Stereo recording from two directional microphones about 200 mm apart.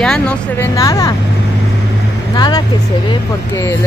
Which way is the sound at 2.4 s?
20° left (ahead or behind).